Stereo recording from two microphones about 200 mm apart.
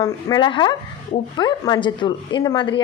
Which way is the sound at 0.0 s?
20° left (ahead or behind).